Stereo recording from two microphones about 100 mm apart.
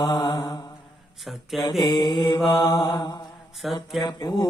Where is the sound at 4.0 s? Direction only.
40° left (ahead or behind).